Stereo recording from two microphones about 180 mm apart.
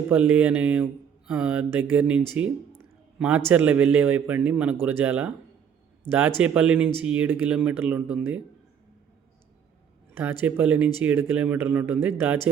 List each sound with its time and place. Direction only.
0.1 s speech: 5° right (ahead or behind)
10.4 s speech: 10° right (ahead or behind)